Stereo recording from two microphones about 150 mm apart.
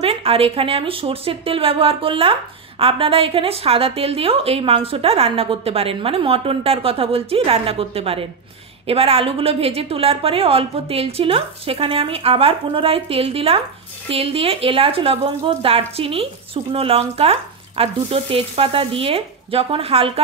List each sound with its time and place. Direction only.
0.0 s a woman's voice: 40° right (ahead or behind)